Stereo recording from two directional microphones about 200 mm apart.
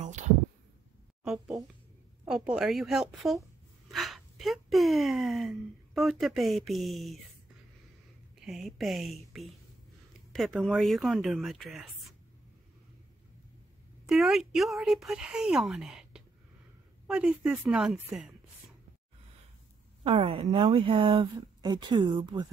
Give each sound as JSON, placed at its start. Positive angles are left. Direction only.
{"t": 0.0, "sound": "a sound", "side_deg": -35}
{"t": 2.2, "sound": "speech", "side_deg": -5}
{"t": 8.5, "sound": "speech", "side_deg": 0}
{"t": 14.0, "sound": "speech", "side_deg": 0}
{"t": 20.0, "sound": "speech", "side_deg": -30}